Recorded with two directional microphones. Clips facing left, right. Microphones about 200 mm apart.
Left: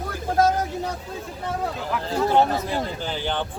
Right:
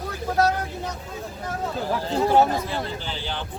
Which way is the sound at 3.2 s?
55° left (ahead or behind).